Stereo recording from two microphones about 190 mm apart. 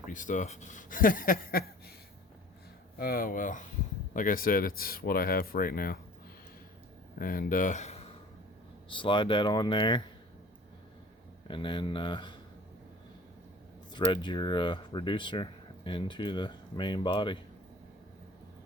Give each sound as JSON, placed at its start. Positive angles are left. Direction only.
{"t": 0.1, "sound": "speech", "side_deg": 40}
{"t": 3.0, "sound": "speech", "side_deg": 50}
{"t": 7.2, "sound": "speech", "side_deg": 50}
{"t": 8.9, "sound": "speech", "side_deg": 25}
{"t": 11.4, "sound": "speech", "side_deg": 25}
{"t": 13.9, "sound": "speech", "side_deg": 25}